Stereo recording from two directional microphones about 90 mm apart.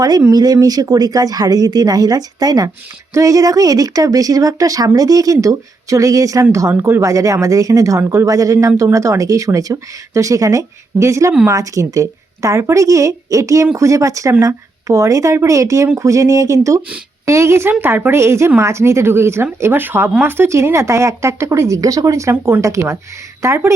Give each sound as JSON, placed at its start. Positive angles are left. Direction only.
{"t": 0.3, "sound": "a woman's voice", "side_deg": -45}